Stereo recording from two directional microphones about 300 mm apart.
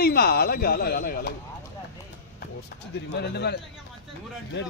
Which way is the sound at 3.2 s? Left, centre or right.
Left.